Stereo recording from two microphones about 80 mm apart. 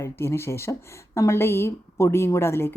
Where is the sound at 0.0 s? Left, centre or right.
Left.